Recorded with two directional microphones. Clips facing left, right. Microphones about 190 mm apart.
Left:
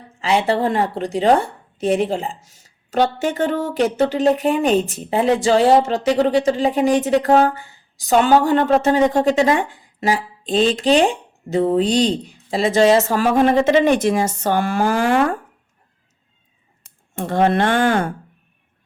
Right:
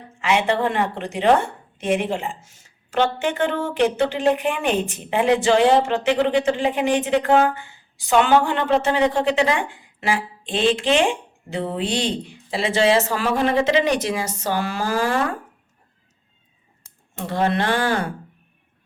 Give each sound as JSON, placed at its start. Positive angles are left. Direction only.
{"t": 0.2, "sound": "speech", "side_deg": 35}
{"t": 17.2, "sound": "speech", "side_deg": 50}